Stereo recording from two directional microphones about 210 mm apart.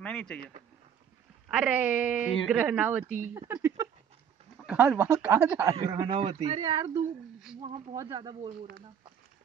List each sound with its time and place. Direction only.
0.0 s speech: 5° left (ahead or behind)
1.5 s speech: 5° right (ahead or behind)